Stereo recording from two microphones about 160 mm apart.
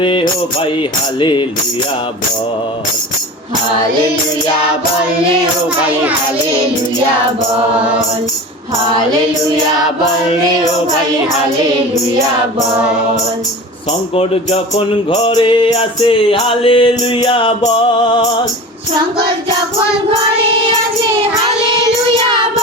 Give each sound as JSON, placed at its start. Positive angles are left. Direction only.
{"t": 0.0, "sound": "music", "side_deg": 30}
{"t": 14.2, "sound": "music", "side_deg": 40}